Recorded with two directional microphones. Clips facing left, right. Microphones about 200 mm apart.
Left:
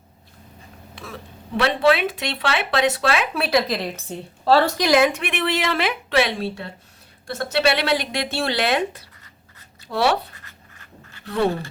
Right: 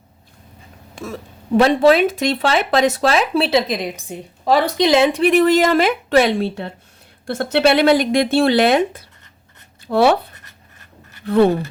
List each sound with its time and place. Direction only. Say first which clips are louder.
0.9 s speech: right 8 dB; 45° right (ahead or behind)
7.5 s speech: right 7 dB; 50° right (ahead or behind)